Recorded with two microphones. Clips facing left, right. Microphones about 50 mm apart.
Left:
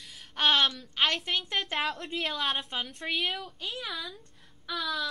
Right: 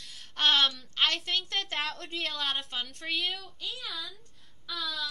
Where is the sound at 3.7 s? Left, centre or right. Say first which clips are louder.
Left 2 dB; centre.